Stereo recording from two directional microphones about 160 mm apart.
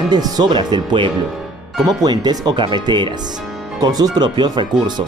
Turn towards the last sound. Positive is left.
turn(degrees=-25)  # may be behind; listen again after turning